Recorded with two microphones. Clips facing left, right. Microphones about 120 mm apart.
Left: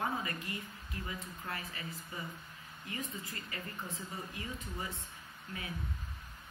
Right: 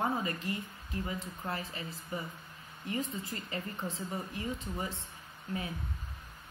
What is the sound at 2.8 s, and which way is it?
A woman's voice, 30° right (ahead or behind).